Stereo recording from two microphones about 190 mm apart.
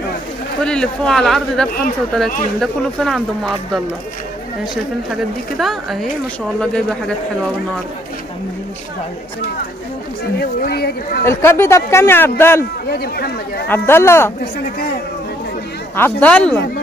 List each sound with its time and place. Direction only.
0.7 s speech: 5° left (ahead or behind)
5.1 s speech: centre (ahead or behind)
10.4 s speech: 55° left (ahead or behind)
11.2 s speech: 15° left (ahead or behind)
12.9 s speech: 55° left (ahead or behind)
13.7 s speech: 10° left (ahead or behind)
16.0 s speech: 5° left (ahead or behind)